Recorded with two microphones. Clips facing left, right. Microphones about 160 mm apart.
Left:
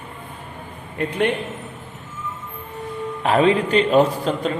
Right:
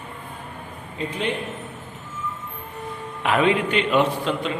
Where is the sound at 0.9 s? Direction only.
60° left (ahead or behind).